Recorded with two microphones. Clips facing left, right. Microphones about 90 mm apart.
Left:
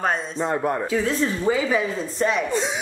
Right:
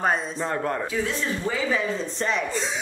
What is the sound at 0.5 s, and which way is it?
A man's voice, 10° left (ahead or behind).